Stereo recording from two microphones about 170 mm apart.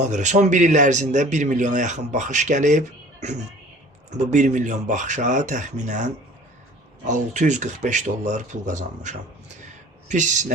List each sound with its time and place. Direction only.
0.0 s a man's voice: 45° right (ahead or behind)